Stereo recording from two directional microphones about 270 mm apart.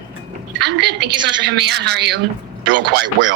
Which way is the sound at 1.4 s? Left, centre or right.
Right.